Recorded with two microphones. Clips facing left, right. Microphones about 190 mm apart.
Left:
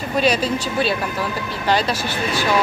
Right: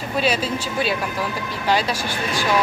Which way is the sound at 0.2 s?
5° right (ahead or behind).